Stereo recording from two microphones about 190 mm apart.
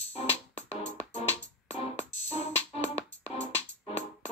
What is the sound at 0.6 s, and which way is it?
Music, 35° left (ahead or behind).